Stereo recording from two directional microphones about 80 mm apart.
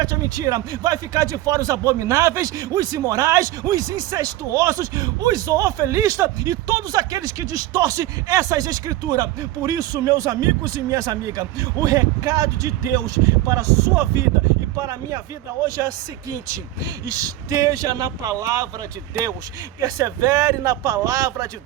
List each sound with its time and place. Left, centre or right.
0.0 s speech: right
17.1 s speech: right
19.8 s speech: right